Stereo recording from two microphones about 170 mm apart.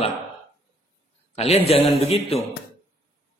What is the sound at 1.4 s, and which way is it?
A man's voice, 35° left (ahead or behind).